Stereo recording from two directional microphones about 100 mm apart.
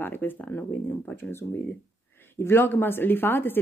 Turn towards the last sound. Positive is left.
turn(degrees=20)  # may be behind; listen again after turning